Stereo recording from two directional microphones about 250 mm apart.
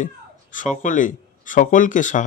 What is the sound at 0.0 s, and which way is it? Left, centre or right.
Speech, left.